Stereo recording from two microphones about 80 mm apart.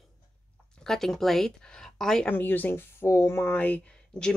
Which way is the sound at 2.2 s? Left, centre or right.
Left.